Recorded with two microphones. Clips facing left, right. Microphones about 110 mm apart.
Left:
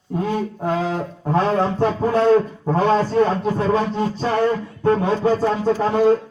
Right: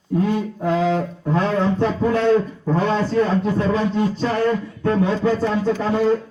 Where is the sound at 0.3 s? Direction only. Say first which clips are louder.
Right 1 dB; 35° left (ahead or behind).